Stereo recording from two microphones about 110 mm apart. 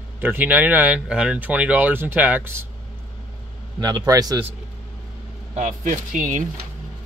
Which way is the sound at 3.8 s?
35° right (ahead or behind).